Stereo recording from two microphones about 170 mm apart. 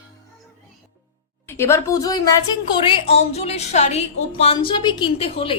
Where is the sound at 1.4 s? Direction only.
15° left (ahead or behind).